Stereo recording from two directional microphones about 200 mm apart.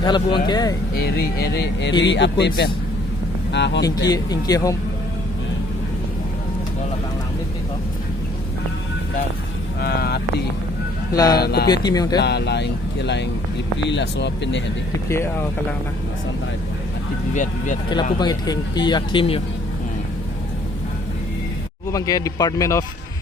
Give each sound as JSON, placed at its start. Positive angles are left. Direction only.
{"t": 0.0, "sound": "speech", "side_deg": 20}
{"t": 0.9, "sound": "speech", "side_deg": 55}
{"t": 3.5, "sound": "speech", "side_deg": 60}
{"t": 4.1, "sound": "speech", "side_deg": 20}
{"t": 9.8, "sound": "speech", "side_deg": 50}
{"t": 11.1, "sound": "speech", "side_deg": 20}
{"t": 11.3, "sound": "speech", "side_deg": 55}
{"t": 11.7, "sound": "speech", "side_deg": 20}
{"t": 12.2, "sound": "speech", "side_deg": 60}
{"t": 15.1, "sound": "speech", "side_deg": 10}
{"t": 17.3, "sound": "speech", "side_deg": 40}
{"t": 17.8, "sound": "speech", "side_deg": 20}
{"t": 21.9, "sound": "speech", "side_deg": 15}